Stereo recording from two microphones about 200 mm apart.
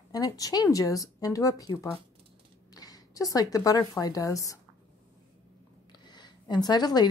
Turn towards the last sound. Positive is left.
turn(degrees=20)  # may be behind; listen again after turning